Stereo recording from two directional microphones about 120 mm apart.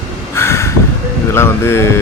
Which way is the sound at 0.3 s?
20° left (ahead or behind).